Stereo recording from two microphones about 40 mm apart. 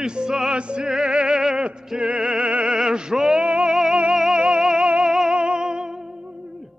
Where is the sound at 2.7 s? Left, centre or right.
Centre.